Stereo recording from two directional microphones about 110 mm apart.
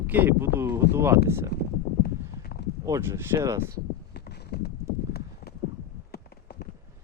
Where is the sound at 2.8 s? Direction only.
25° right (ahead or behind).